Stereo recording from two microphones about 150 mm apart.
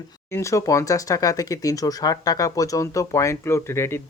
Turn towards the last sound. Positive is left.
turn(degrees=15)  # may be behind; listen again after turning